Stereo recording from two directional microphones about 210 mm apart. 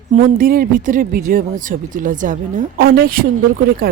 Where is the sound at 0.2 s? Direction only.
40° right (ahead or behind).